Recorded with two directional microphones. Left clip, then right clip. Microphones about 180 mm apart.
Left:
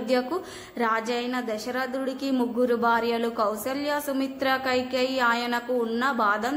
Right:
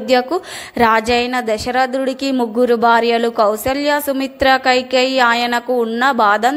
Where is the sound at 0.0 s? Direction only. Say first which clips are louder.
Right 11 dB; 35° right (ahead or behind).